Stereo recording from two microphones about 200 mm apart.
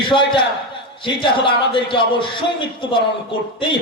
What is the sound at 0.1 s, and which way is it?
A man's voice, 25° left (ahead or behind).